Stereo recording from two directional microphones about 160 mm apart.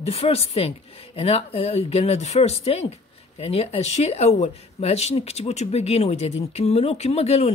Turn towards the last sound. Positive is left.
turn(degrees=40)  # may be behind; listen again after turning